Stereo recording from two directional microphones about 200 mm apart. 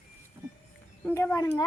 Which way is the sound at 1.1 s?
10° left (ahead or behind).